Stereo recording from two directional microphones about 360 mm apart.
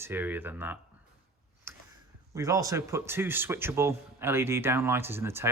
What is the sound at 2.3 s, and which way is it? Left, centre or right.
Speech, centre.